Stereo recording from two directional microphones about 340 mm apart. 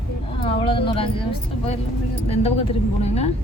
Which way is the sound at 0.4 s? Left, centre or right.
Centre.